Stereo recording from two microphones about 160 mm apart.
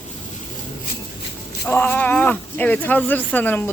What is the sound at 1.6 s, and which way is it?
Speech, 10° left (ahead or behind).